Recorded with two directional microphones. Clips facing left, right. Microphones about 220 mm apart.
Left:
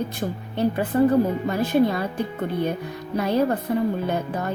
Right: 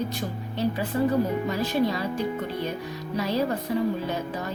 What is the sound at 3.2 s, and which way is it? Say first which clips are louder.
A woman's voice: left 5 dB; 55° left (ahead or behind).